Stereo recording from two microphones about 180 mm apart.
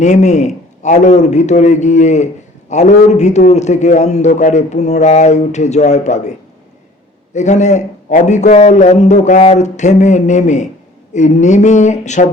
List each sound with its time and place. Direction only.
0.0 s a man's voice: 40° left (ahead or behind)
7.3 s a man's voice: 40° left (ahead or behind)